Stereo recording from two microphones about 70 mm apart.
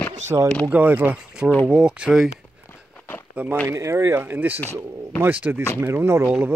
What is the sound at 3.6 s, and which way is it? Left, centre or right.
Speech, right.